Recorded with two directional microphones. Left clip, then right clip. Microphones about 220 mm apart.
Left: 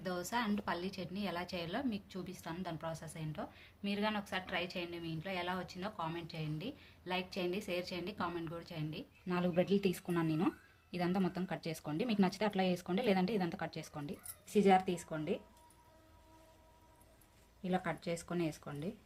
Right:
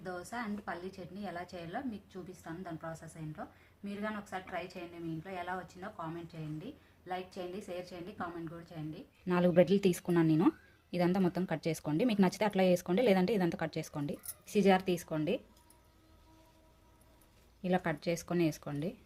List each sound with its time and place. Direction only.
0.0 s a woman's voice: 40° left (ahead or behind)
9.2 s speech: 30° right (ahead or behind)
17.6 s speech: 25° right (ahead or behind)